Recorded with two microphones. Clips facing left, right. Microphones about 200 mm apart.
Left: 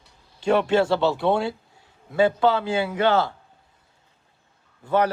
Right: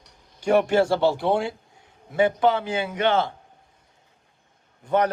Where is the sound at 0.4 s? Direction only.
25° right (ahead or behind).